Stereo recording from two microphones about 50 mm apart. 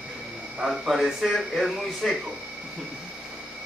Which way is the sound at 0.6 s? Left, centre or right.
Centre.